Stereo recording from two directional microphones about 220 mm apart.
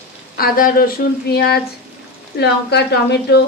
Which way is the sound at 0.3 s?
40° left (ahead or behind).